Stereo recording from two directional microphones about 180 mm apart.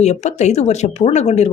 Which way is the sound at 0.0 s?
40° left (ahead or behind).